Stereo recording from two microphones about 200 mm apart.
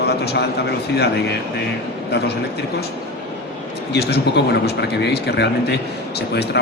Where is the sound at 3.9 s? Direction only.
55° left (ahead or behind).